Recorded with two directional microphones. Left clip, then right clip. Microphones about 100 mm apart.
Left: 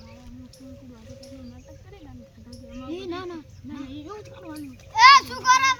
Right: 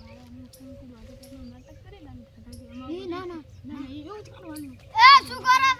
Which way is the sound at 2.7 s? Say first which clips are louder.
Left 1 dB; centre (ahead or behind).